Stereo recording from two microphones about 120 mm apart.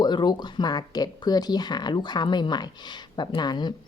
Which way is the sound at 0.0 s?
40° left (ahead or behind).